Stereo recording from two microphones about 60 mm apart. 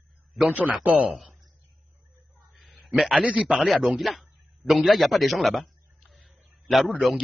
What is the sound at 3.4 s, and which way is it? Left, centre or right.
Speech, centre.